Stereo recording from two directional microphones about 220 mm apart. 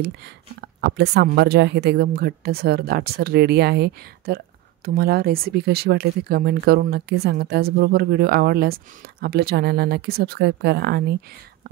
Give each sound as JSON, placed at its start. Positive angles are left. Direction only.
{"t": 0.6, "sound": "speech", "side_deg": -45}